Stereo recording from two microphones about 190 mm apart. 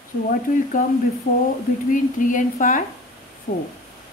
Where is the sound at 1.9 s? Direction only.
45° left (ahead or behind).